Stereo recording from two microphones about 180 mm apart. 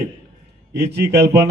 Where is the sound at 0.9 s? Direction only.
65° right (ahead or behind).